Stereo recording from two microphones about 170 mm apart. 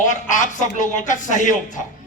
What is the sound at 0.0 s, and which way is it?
A man's voice, 45° left (ahead or behind).